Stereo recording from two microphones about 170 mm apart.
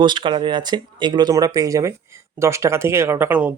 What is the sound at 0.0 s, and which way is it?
Speech, 25° right (ahead or behind).